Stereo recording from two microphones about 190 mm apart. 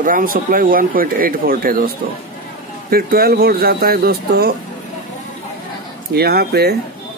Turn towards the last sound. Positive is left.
turn(degrees=-55)  # may be behind; listen again after turning